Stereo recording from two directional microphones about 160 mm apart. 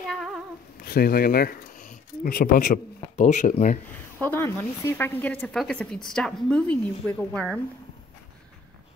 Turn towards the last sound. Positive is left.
turn(degrees=5)  # may be behind; listen again after turning